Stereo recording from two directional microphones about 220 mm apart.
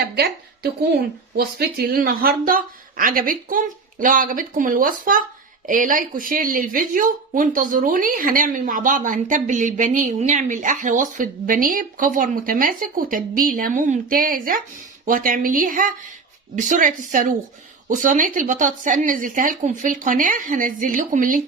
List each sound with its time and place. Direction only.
0.0 s a woman's voice: 45° right (ahead or behind)